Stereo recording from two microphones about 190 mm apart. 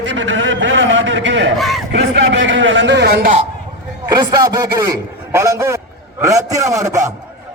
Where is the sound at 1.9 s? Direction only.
65° right (ahead or behind).